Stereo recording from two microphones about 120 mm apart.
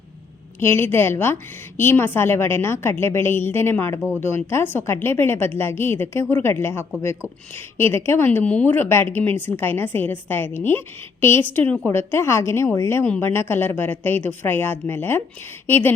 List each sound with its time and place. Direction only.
0.6 s a woman's voice: 20° left (ahead or behind)